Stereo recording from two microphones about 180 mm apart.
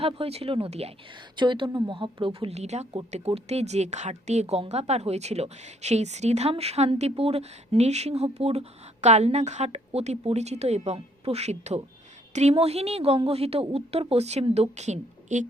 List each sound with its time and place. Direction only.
0.0 s a woman's voice: 35° right (ahead or behind)